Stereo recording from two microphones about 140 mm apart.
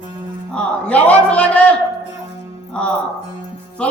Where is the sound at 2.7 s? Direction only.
10° left (ahead or behind).